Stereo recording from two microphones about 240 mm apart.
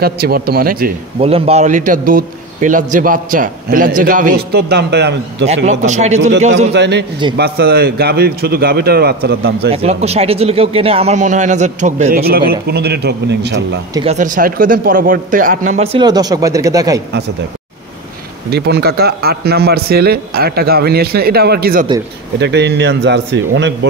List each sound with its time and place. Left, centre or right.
0.0 s a man's voice: right
1.2 s a man's voice: right
5.7 s a man's voice: right
6.7 s a man's voice: right
9.7 s a man's voice: right
14.0 s a man's voice: right; by 17.0 s centre
18.5 s a man's voice: right